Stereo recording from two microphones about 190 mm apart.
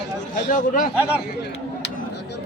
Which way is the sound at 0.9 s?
10° right (ahead or behind).